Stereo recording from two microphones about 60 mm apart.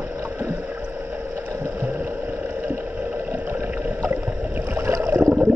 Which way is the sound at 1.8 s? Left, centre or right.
Right.